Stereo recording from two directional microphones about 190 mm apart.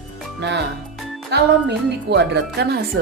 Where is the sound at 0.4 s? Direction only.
65° right (ahead or behind).